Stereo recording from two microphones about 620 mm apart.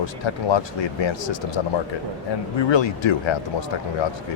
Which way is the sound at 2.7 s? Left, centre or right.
Left.